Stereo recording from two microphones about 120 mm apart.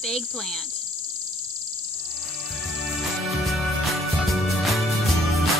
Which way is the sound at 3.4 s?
Centre (ahead or behind).